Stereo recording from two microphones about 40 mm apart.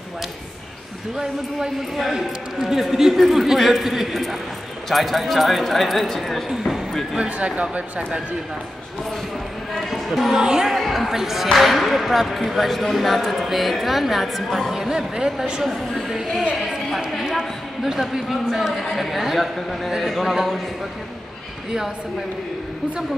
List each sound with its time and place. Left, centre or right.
1.1 s a man's voice: centre
7.2 s speech: right
9.8 s a sound: centre
10.3 s a man's voice: centre
15.6 s speech: centre
16.5 s a sound: centre
17.3 s speech: centre